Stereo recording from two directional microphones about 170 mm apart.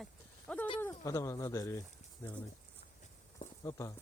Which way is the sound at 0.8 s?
15° left (ahead or behind).